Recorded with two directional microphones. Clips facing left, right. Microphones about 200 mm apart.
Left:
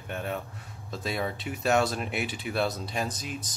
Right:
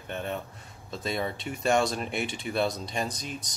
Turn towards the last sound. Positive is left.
turn(degrees=5)  # may be behind; listen again after turning